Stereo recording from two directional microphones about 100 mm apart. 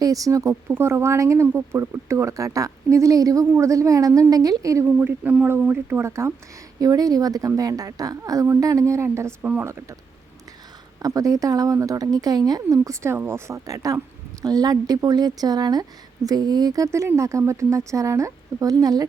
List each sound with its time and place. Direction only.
0.0 s speech: 35° right (ahead or behind)
4.9 s speech: 20° right (ahead or behind)
9.4 s speech: 15° right (ahead or behind)
11.0 s speech: 35° right (ahead or behind)